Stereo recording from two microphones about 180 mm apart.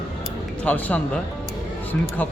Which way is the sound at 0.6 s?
5° left (ahead or behind).